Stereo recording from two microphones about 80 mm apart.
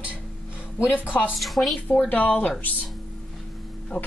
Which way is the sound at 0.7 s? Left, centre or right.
Left.